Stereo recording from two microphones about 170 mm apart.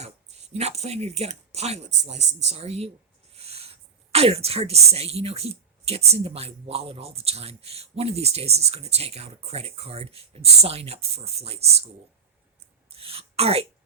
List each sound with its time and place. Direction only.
0.5 s speech: 40° right (ahead or behind)
3.3 s a sound: 35° right (ahead or behind)
6.1 s speech: 35° right (ahead or behind)
13.0 s throat clearing: 35° right (ahead or behind)